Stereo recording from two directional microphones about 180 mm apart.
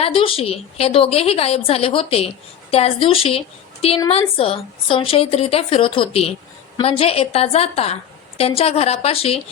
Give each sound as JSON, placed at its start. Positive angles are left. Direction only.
{"t": 0.0, "sound": "a woman's voice", "side_deg": 30}